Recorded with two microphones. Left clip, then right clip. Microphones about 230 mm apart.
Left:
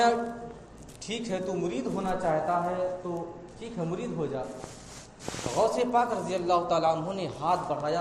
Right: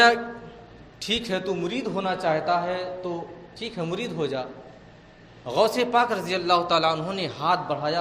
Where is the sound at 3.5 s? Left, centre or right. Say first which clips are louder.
Right 5 dB; right.